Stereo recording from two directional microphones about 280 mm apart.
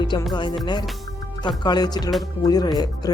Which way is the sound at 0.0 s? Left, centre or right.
Centre.